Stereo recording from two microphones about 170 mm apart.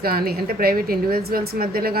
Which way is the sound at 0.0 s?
65° right (ahead or behind).